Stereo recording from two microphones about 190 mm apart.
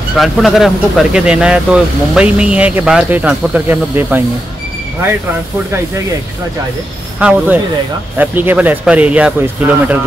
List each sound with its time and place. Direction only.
0.2 s speech: centre (ahead or behind)
7.2 s speech: 5° right (ahead or behind)